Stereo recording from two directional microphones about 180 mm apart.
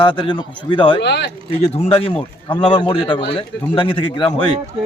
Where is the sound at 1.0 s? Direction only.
70° left (ahead or behind).